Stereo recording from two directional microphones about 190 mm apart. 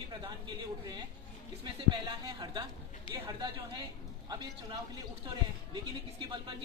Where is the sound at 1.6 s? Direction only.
25° right (ahead or behind).